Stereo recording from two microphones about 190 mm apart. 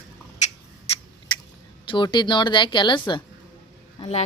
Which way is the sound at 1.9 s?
25° left (ahead or behind).